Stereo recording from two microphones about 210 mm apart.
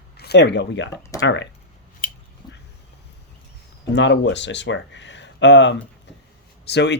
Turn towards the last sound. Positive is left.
turn(degrees=55)  # may be behind; listen again after turning